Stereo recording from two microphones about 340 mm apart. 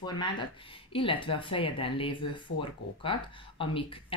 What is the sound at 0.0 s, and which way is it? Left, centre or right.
Speech, centre.